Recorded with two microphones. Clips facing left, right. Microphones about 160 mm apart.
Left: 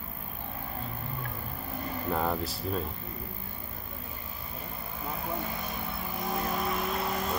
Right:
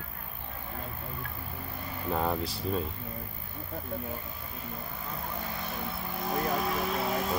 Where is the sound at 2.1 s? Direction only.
5° right (ahead or behind).